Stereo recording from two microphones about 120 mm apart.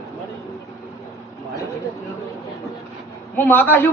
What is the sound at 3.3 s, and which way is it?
Speech, 15° left (ahead or behind).